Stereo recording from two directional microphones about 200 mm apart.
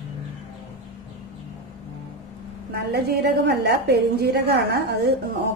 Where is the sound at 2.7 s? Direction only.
55° right (ahead or behind).